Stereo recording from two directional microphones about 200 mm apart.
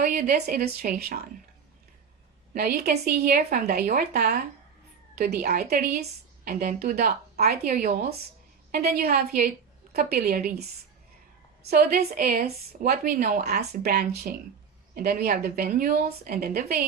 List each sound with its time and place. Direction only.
0.0 s speech: 40° right (ahead or behind)
2.5 s speech: 50° right (ahead or behind)